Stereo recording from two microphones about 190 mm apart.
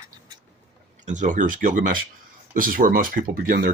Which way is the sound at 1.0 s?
40° right (ahead or behind).